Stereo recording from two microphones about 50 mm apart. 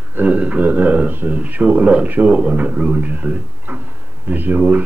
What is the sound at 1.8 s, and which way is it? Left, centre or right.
Speech, right.